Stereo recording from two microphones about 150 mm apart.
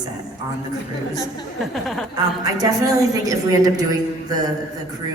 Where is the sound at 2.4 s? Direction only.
25° right (ahead or behind).